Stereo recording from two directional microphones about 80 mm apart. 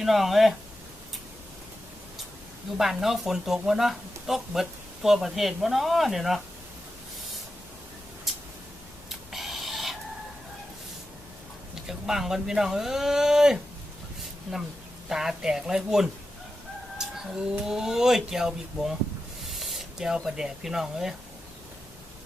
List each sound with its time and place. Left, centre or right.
0.0 s speech: centre
2.7 s speech: centre
8.3 s a sound: centre
9.0 s printer: centre
11.7 s speech: centre
15.1 s speech: centre
17.0 s chicken: centre
17.7 s speech: centre